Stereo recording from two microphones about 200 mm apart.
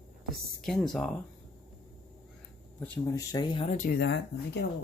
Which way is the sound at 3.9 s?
60° left (ahead or behind).